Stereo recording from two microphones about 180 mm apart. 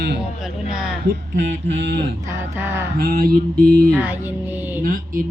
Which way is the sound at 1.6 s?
80° right.